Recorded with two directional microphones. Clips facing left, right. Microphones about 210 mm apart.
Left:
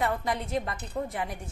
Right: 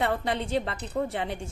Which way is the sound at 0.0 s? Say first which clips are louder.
Right 2 dB; 30° right (ahead or behind).